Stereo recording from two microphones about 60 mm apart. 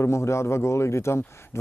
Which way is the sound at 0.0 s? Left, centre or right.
Left.